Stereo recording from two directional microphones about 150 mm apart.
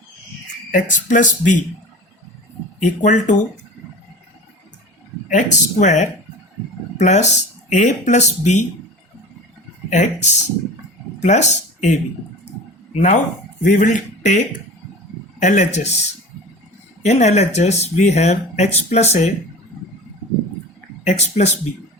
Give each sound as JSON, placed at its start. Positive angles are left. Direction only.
{"t": 0.7, "sound": "speech", "side_deg": 60}
{"t": 2.8, "sound": "speech", "side_deg": 55}
{"t": 5.3, "sound": "speech", "side_deg": 55}
{"t": 9.9, "sound": "speech", "side_deg": 50}
{"t": 17.0, "sound": "speech", "side_deg": 50}
{"t": 21.0, "sound": "speech", "side_deg": 45}